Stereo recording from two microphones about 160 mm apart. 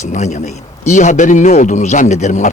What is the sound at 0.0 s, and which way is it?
Speech, 45° left (ahead or behind).